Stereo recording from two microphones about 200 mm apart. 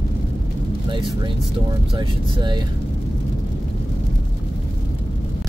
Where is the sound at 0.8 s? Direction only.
25° right (ahead or behind).